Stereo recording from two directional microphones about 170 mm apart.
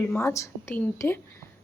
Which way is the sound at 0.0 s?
15° left (ahead or behind).